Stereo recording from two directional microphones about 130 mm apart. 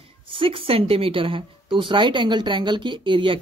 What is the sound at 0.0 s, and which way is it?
A woman's voice, 45° right (ahead or behind).